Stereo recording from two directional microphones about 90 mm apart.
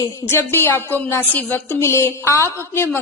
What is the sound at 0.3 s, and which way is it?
A woman's voice, 30° left (ahead or behind).